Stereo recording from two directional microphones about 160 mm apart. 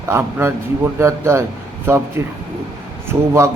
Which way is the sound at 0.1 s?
15° right (ahead or behind).